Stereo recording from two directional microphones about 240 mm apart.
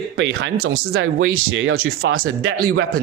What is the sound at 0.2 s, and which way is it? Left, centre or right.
Speech, right.